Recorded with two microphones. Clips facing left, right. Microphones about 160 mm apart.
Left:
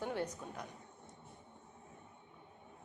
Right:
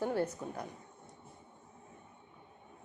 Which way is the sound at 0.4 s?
15° right (ahead or behind).